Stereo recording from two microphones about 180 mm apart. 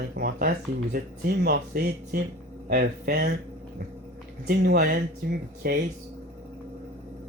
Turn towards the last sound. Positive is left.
turn(degrees=-60)  # may be behind; listen again after turning